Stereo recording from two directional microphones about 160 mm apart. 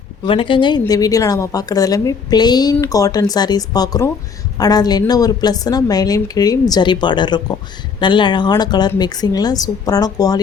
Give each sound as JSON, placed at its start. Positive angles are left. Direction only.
{"t": 0.3, "sound": "a woman's voice", "side_deg": 35}